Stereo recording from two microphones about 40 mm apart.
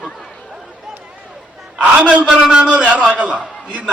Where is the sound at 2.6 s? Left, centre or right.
Right.